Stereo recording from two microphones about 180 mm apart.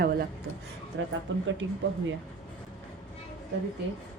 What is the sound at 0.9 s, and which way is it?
Speech, 90° right.